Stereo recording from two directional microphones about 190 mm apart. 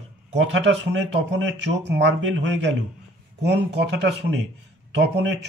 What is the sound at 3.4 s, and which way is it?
Speech, 60° right (ahead or behind).